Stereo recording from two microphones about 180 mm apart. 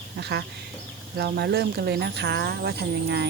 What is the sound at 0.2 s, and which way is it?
Speech, 70° right (ahead or behind).